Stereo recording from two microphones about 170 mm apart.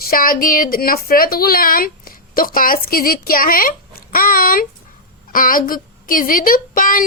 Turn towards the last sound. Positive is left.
turn(degrees=55)  # may be behind; listen again after turning